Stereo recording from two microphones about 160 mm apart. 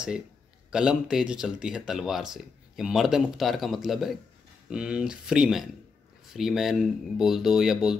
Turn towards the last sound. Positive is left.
turn(degrees=-5)  # may be behind; listen again after turning